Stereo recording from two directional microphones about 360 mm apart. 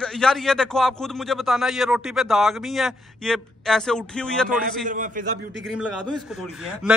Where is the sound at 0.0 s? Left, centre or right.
Centre.